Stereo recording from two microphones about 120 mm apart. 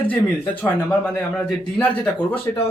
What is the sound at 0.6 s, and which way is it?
Speech, 10° left (ahead or behind).